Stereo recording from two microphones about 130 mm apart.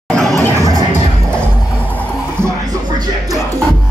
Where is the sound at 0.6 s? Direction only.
25° right (ahead or behind).